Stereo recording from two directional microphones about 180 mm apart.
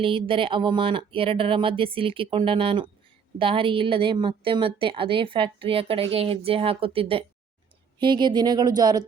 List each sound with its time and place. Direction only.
0.0 s a woman's voice: 30° right (ahead or behind)